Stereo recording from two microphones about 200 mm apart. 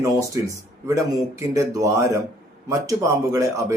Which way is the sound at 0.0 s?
15° right (ahead or behind).